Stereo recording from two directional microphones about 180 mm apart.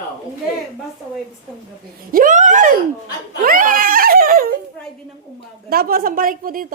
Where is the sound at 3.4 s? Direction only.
50° right (ahead or behind).